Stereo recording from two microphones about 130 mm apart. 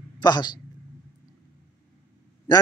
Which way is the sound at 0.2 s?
35° left (ahead or behind).